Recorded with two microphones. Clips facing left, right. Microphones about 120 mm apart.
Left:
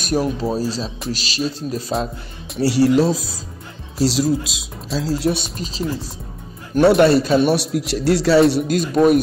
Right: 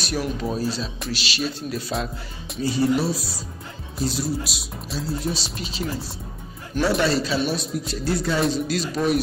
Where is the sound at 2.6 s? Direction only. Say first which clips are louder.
Left 6 dB; 80° left.